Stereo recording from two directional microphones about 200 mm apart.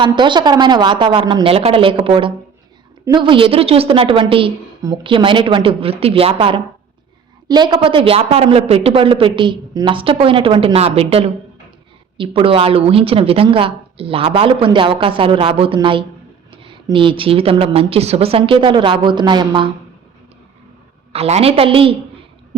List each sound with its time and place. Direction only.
0.0 s a woman's voice: 25° right (ahead or behind)
21.1 s a woman's voice: 30° right (ahead or behind)